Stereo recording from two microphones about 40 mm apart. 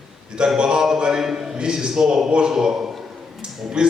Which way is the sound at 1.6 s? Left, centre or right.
Centre.